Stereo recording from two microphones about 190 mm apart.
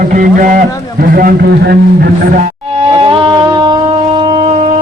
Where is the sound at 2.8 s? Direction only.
25° right (ahead or behind).